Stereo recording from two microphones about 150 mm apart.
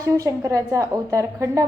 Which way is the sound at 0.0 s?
20° right (ahead or behind).